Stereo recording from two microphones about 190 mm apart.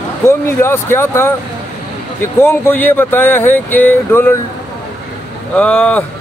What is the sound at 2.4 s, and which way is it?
Speech, 10° left (ahead or behind).